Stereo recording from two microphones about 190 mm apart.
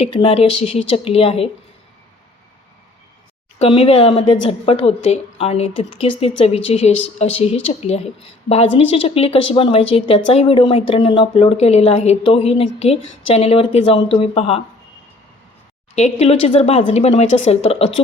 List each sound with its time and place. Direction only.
0.0 s speech: 30° left (ahead or behind)
3.6 s a woman's voice: 30° left (ahead or behind)
16.0 s speech: 35° left (ahead or behind)